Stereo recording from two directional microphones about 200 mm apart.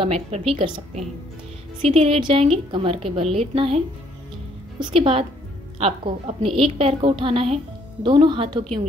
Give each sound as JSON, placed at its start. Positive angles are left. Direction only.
{"t": 0.0, "sound": "a woman's voice", "side_deg": -30}
{"t": 1.8, "sound": "speech", "side_deg": -30}